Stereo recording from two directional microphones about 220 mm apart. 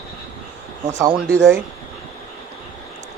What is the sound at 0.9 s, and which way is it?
Speech, 15° right (ahead or behind).